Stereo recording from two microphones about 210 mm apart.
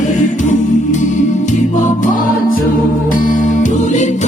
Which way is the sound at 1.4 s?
40° left (ahead or behind).